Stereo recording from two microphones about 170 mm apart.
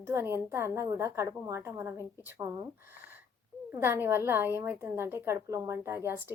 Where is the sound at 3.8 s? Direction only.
15° right (ahead or behind).